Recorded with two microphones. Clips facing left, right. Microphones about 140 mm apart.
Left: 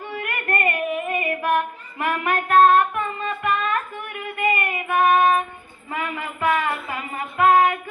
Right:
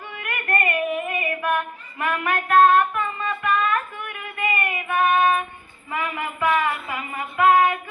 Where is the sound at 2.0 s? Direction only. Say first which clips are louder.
Left 1 dB; 30° left (ahead or behind).